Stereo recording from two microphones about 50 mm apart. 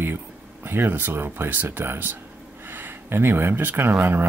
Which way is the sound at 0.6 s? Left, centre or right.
Right.